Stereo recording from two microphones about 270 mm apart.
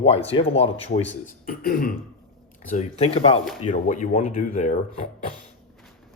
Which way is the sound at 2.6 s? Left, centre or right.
Left.